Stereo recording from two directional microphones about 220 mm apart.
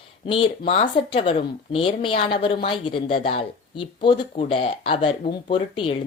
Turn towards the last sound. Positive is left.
turn(degrees=25)  # may be behind; listen again after turning